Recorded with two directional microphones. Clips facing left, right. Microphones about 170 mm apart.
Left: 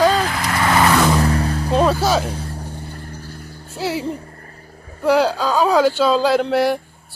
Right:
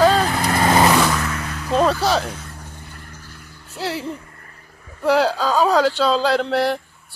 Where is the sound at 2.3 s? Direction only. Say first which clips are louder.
Left 6 dB; 30° left (ahead or behind).